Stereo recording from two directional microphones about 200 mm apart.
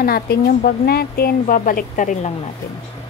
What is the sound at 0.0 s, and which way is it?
A woman's voice, 50° left (ahead or behind).